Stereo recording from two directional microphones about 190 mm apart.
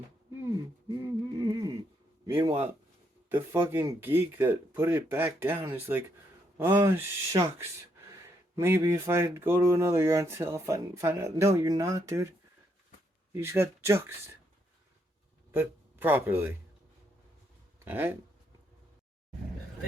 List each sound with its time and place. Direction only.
1.0 s a sound: 20° right (ahead or behind)
2.2 s speech: 20° right (ahead or behind)
3.2 s speech: 10° right (ahead or behind)
13.3 s speech: 15° right (ahead or behind)
15.5 s speech: 10° right (ahead or behind)
17.8 s speech: 10° right (ahead or behind)